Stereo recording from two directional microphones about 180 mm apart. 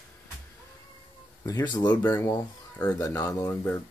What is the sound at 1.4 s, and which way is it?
Speech, 25° left (ahead or behind).